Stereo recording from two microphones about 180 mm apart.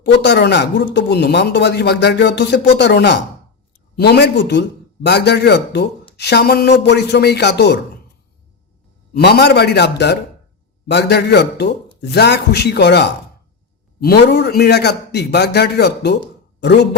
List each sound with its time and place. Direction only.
0.0 s speech: 70° left (ahead or behind)
9.1 s speech: 65° left (ahead or behind)